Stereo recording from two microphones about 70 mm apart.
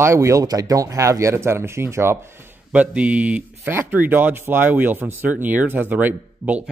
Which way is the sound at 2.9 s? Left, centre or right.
Centre.